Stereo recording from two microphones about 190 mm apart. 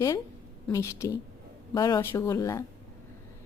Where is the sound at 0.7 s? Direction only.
15° left (ahead or behind).